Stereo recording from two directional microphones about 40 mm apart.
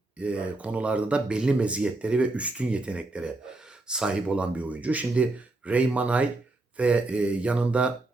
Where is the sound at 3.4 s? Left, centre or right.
Centre.